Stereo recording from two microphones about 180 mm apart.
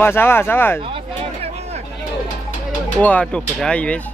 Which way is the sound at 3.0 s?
10° left (ahead or behind).